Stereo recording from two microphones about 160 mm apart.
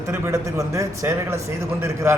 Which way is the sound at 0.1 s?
20° right (ahead or behind).